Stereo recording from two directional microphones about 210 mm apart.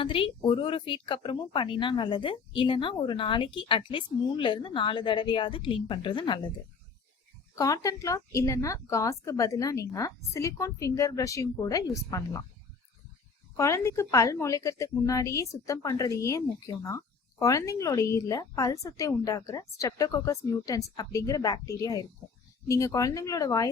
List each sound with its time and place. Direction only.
0.0 s speech: 25° left (ahead or behind)
7.5 s a woman's voice: 15° left (ahead or behind)
13.6 s a woman's voice: 15° left (ahead or behind)